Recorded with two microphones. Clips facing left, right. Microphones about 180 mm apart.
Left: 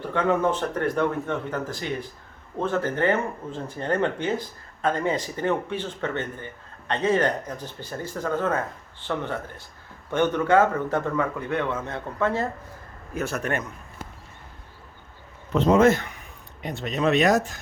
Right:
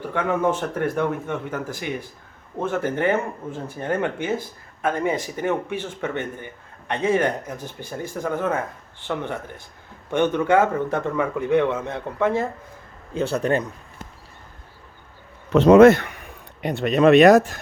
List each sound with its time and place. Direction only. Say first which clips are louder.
0.1 s speech: even; 10° right (ahead or behind)
13.1 s speech: right 6 dB; 30° right (ahead or behind)
15.4 s a man's voice: right 7 dB; 75° right (ahead or behind); by 17.6 s 60° right (ahead or behind)